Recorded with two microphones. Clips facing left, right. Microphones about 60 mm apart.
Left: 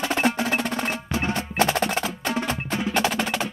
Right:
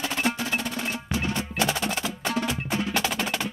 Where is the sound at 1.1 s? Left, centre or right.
Left.